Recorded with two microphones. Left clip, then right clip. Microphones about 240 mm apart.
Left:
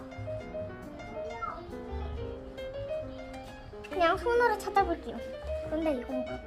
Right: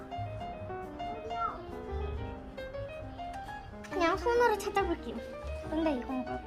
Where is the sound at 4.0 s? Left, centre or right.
Left.